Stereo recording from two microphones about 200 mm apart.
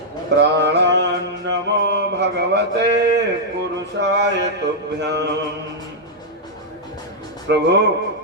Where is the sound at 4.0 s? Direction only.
60° right (ahead or behind).